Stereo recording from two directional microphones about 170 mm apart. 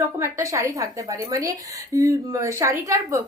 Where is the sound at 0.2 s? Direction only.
15° right (ahead or behind).